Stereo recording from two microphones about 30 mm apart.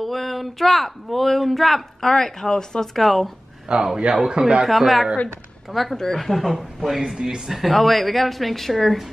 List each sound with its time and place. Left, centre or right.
0.0 s speech: centre
2.0 s speech: centre
3.0 s speech: centre
3.7 s speech: right
4.6 s speech: centre
7.2 s speech: centre
7.7 s speech: centre